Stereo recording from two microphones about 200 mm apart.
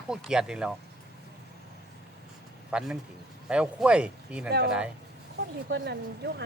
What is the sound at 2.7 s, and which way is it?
Speech, 5° right (ahead or behind).